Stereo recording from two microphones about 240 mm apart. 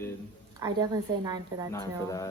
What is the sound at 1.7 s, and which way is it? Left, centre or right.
Speech, centre.